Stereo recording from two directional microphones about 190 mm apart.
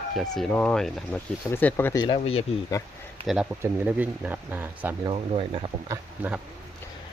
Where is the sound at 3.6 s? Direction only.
10° right (ahead or behind).